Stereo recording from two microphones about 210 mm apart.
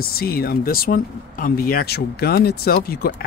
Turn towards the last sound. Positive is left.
turn(degrees=45)  # may be behind; listen again after turning